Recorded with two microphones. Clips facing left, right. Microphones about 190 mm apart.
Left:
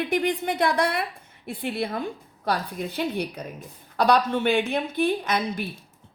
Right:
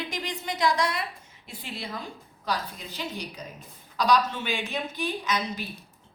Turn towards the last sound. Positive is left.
turn(degrees=55)  # may be behind; listen again after turning